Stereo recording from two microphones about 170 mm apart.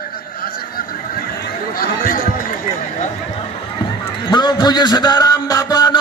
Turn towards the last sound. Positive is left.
turn(degrees=25)  # may be behind; listen again after turning